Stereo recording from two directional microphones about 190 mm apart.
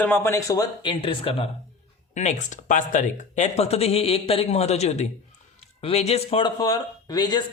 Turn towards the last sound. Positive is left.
turn(degrees=20)  # may be behind; listen again after turning